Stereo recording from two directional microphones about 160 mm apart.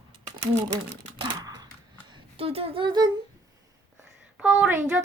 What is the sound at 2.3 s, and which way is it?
Speech, 35° right (ahead or behind).